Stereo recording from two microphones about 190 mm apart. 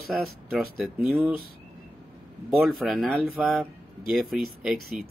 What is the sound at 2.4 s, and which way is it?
Speech, centre (ahead or behind).